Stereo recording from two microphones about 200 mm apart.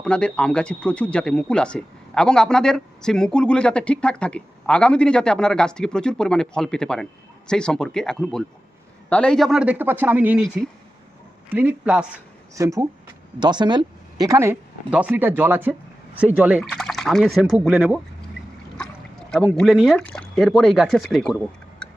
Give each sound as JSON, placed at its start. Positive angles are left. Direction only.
{"t": 0.0, "sound": "speech", "side_deg": 5}
{"t": 19.3, "sound": "speech", "side_deg": 0}